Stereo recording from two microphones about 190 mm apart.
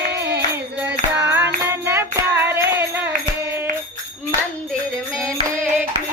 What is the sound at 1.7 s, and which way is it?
Music, 15° right (ahead or behind).